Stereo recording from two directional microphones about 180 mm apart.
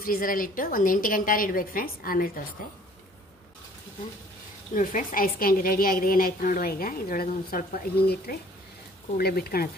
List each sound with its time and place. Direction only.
0.0 s a woman's voice: 55° left (ahead or behind)
4.7 s a woman's voice: 50° left (ahead or behind)